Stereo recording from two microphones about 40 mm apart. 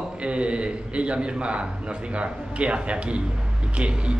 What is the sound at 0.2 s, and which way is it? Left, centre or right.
A man's voice, right.